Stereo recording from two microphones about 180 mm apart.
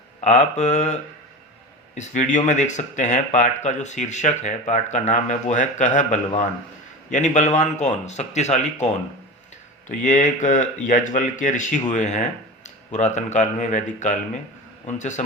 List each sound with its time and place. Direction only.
0.2 s speech: 40° left (ahead or behind)
2.0 s speech: 40° left (ahead or behind)
9.9 s speech: 45° left (ahead or behind)